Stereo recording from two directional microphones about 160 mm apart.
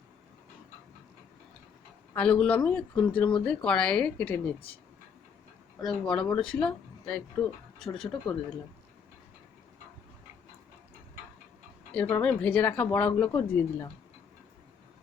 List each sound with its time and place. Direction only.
2.1 s speech: 5° left (ahead or behind)
5.8 s speech: 5° left (ahead or behind)
11.9 s speech: 10° left (ahead or behind)